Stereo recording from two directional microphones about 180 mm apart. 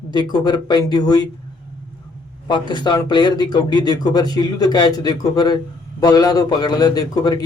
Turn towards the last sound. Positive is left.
turn(degrees=20)  # may be behind; listen again after turning